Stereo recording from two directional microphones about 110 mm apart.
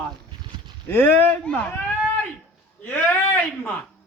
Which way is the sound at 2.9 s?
20° left (ahead or behind).